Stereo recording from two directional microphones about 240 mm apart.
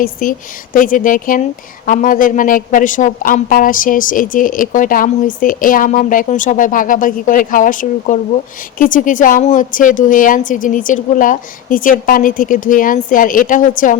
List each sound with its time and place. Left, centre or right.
0.0 s a woman's voice: left